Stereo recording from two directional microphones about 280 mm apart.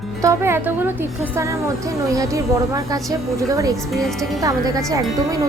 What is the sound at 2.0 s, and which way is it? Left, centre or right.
A woman's voice, centre.